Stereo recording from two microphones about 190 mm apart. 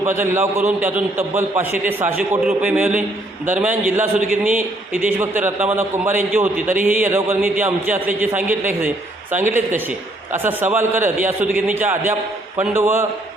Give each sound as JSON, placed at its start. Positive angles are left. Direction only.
{"t": 0.0, "sound": "a man's voice", "side_deg": -15}
{"t": 4.2, "sound": "speech", "side_deg": -45}
{"t": 4.5, "sound": "a man's voice", "side_deg": -10}